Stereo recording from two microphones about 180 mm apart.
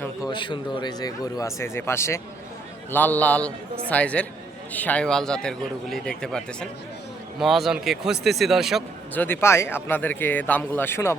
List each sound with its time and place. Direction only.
0.3 s a man's voice: 25° left (ahead or behind); by 8.8 s centre (ahead or behind)
9.1 s speech: 10° left (ahead or behind)